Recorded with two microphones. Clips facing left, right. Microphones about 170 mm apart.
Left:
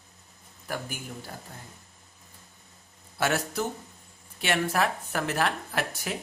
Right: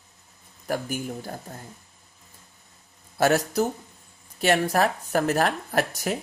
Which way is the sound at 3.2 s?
40° right (ahead or behind).